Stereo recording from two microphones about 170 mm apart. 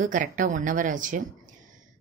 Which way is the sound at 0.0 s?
50° right (ahead or behind).